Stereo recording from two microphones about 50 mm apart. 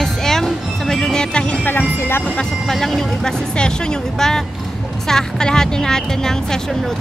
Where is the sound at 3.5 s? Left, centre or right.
Centre.